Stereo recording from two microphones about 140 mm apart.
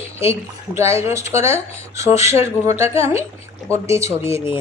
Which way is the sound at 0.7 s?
20° right (ahead or behind).